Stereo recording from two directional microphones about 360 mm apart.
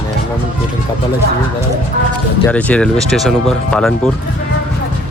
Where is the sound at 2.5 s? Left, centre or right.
Centre.